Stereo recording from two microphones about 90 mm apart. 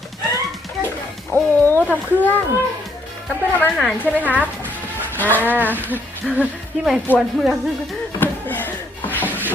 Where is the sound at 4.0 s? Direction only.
20° left (ahead or behind).